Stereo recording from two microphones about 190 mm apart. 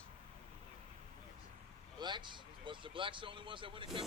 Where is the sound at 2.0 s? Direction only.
25° right (ahead or behind).